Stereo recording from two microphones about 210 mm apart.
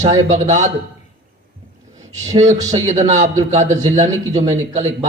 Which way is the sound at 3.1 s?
35° right (ahead or behind).